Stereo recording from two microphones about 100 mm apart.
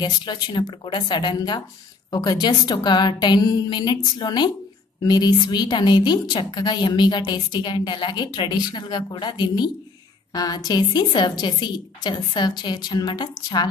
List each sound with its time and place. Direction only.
0.0 s a woman's voice: 50° left (ahead or behind)